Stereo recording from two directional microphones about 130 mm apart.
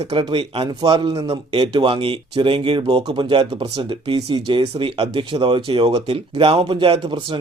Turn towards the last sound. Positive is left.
turn(degrees=-40)  # may be behind; listen again after turning